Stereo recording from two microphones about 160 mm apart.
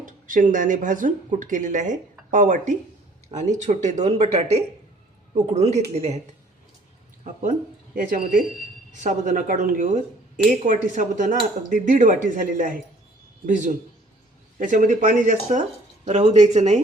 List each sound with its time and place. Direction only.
0.0 s speech: 55° right (ahead or behind)
9.0 s speech: 50° right (ahead or behind)